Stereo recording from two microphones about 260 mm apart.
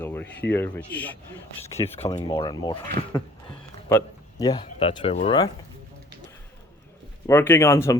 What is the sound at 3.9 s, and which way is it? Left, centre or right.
Speech, centre.